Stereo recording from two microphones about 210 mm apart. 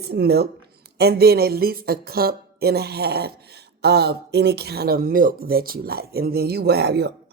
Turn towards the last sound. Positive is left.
turn(degrees=-50)  # may be behind; listen again after turning